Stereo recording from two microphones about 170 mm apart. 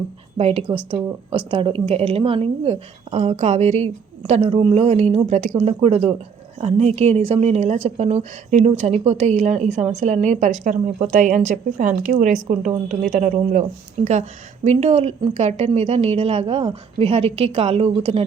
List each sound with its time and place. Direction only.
0.3 s a woman's voice: 35° right (ahead or behind)